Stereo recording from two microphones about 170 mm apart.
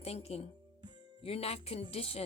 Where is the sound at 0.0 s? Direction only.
35° left (ahead or behind).